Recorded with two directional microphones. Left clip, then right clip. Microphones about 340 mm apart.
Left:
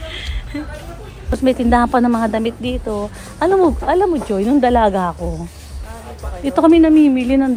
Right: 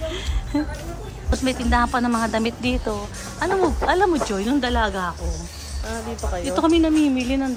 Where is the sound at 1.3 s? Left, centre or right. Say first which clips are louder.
Left 7 dB; centre.